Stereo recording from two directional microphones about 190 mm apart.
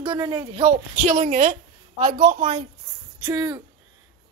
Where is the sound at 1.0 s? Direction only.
45° right (ahead or behind).